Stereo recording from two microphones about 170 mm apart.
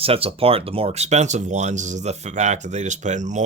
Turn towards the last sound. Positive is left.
turn(degrees=-45)  # may be behind; listen again after turning